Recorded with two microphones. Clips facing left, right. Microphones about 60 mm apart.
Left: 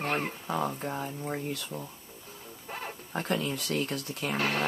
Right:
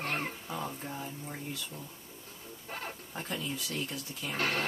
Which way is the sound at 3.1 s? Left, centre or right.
Left.